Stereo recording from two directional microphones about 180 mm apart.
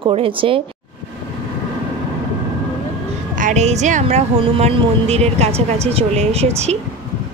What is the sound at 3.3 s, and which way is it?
Speech, 45° right (ahead or behind).